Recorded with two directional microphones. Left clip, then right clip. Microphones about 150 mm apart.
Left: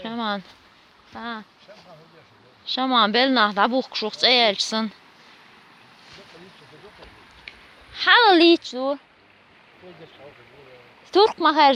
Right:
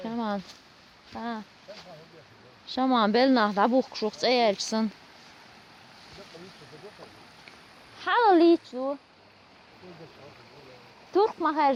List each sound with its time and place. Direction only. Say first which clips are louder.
0.0 s a sound: left 4 dB; 5° right (ahead or behind)
1.2 s speech: left 3 dB; 20° right (ahead or behind)
2.6 s speech: left 5 dB; 20° right (ahead or behind)
7.5 s a sound: left 11 dB; 10° right (ahead or behind)
7.9 s a woman's voice: left 6 dB; 5° left (ahead or behind)
11.1 s a woman's voice: left 7 dB; 20° left (ahead or behind)